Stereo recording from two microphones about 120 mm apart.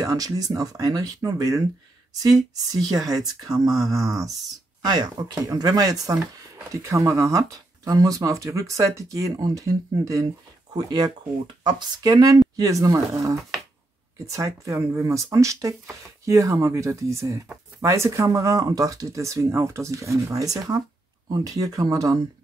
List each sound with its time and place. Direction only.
0.0 s speech: 30° right (ahead or behind)